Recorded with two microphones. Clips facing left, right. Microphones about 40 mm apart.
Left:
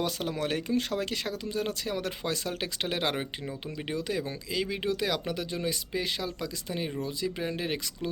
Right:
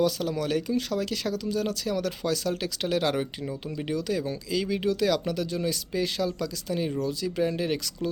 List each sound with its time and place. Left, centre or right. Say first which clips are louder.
0.0 s speech: right 5 dB; left; by 7.8 s centre